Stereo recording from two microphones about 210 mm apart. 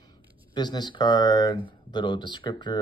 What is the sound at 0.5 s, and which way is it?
Speech, 20° left (ahead or behind).